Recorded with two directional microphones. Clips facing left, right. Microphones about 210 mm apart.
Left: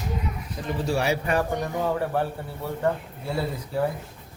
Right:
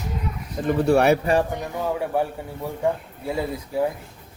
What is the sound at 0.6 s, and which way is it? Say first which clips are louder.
Speech: right 8 dB; 60° right (ahead or behind).